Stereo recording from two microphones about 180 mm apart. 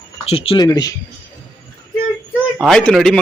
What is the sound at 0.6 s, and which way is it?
Speech, 20° left (ahead or behind).